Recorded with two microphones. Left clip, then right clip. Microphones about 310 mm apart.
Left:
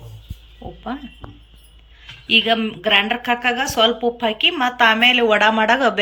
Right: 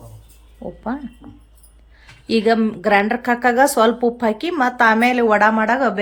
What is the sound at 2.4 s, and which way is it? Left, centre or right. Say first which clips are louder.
A woman's voice: right 2 dB; centre.